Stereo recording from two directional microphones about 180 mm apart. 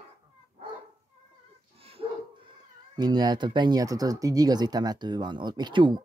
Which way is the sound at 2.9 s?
20° right (ahead or behind).